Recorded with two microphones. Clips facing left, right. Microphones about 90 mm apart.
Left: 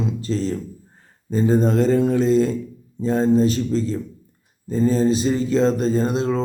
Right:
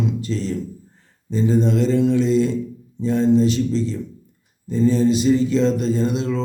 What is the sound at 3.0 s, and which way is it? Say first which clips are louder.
Mantra: right 1 dB; 40° left (ahead or behind).